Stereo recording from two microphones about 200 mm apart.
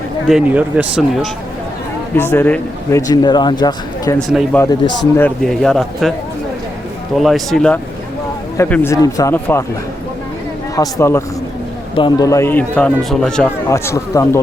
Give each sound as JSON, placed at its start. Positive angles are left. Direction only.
{"t": 0.3, "sound": "speech", "side_deg": -5}
{"t": 2.1, "sound": "speech", "side_deg": 10}
{"t": 4.2, "sound": "speech", "side_deg": 0}
{"t": 4.5, "sound": "speech", "side_deg": 15}
{"t": 7.2, "sound": "speech", "side_deg": 0}
{"t": 10.8, "sound": "speech", "side_deg": 15}
{"t": 13.7, "sound": "speech", "side_deg": 15}